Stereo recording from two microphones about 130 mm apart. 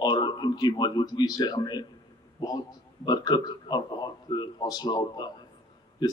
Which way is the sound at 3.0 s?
35° left (ahead or behind).